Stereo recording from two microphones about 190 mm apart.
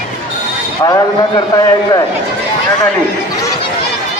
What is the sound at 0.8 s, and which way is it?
A man's voice, 20° left (ahead or behind).